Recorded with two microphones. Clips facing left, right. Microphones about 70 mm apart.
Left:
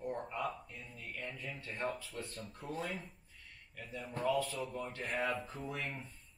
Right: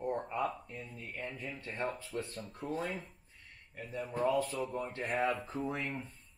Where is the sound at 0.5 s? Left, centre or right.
Right.